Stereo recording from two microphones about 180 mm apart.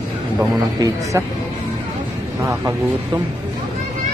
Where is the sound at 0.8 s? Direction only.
15° right (ahead or behind).